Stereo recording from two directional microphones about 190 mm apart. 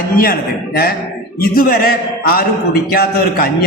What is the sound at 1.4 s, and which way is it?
A man's voice, 50° left (ahead or behind).